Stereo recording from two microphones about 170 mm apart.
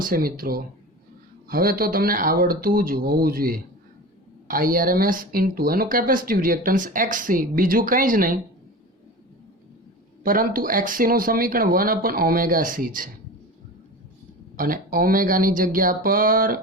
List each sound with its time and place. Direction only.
0.0 s speech: 60° right (ahead or behind)
10.2 s speech: 55° right (ahead or behind)
14.5 s speech: 55° right (ahead or behind)